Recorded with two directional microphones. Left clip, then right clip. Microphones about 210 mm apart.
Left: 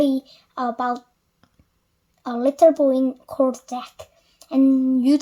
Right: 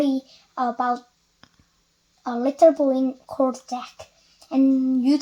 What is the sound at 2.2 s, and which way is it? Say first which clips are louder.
Speech: left 1 dB; 40° left (ahead or behind).